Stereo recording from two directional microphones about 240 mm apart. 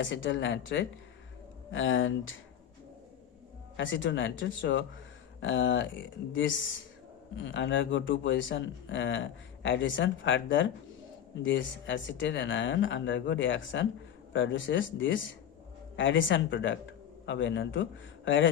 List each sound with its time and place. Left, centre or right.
0.0 s speech: left
3.8 s speech: left